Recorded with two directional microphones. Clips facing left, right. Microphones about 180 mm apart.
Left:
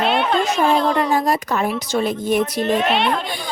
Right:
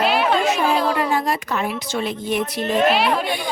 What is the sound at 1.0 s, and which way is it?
Speech, 40° left (ahead or behind).